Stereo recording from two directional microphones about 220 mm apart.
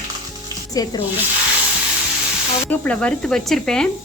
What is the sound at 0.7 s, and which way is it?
Speech, 15° left (ahead or behind).